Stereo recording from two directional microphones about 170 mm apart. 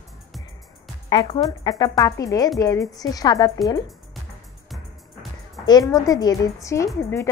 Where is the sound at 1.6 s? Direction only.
20° left (ahead or behind).